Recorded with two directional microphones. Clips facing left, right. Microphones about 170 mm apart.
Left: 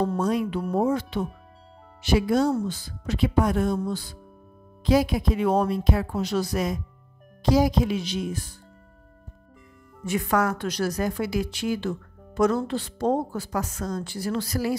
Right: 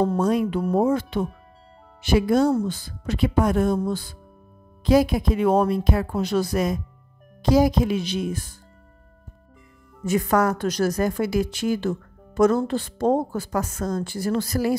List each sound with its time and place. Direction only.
0.0 s a woman's voice: 50° right (ahead or behind)
10.0 s a woman's voice: 40° right (ahead or behind)